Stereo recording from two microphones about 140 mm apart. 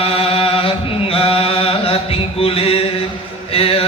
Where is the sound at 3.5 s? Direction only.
45° left (ahead or behind).